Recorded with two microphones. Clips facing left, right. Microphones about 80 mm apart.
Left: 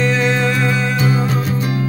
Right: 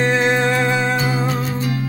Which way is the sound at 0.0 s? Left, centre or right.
Right.